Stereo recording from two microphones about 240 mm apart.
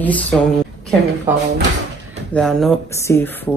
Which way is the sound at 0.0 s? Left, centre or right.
Centre.